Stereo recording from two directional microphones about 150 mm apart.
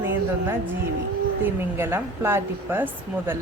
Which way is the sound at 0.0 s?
15° right (ahead or behind).